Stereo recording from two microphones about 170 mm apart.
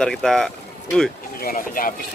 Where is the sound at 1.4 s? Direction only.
55° left (ahead or behind).